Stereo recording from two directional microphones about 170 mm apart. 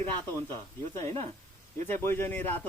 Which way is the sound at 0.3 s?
15° left (ahead or behind).